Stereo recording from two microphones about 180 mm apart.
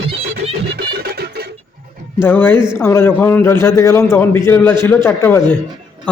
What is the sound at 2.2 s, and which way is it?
A man's voice, 10° left (ahead or behind).